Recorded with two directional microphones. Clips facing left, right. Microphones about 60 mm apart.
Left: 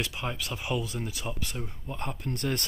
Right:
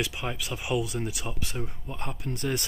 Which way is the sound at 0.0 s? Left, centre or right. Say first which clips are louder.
Right 2 dB; centre.